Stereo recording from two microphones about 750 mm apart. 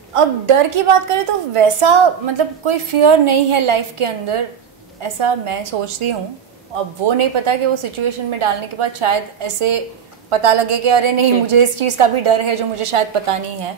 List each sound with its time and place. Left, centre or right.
0.1 s a woman's voice: right